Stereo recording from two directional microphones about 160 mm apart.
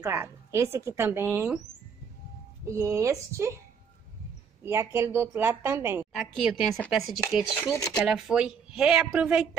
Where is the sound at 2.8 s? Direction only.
20° right (ahead or behind).